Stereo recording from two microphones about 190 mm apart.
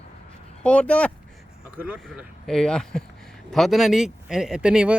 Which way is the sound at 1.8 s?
5° right (ahead or behind).